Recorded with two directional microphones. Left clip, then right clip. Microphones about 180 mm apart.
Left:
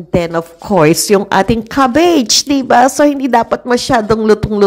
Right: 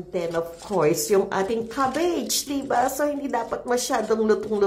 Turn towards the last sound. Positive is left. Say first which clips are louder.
# left 10 dB
turn(degrees=35)  # may be behind; listen again after turning